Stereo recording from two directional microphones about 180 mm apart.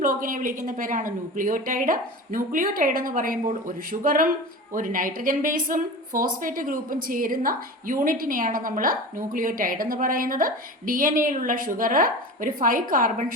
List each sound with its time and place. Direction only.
0.0 s speech: 50° right (ahead or behind)